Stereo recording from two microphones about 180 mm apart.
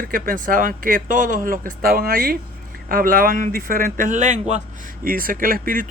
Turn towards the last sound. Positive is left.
turn(degrees=-50)  # may be behind; listen again after turning